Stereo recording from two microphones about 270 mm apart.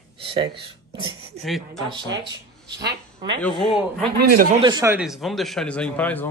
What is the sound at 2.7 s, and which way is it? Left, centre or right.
Speech, right.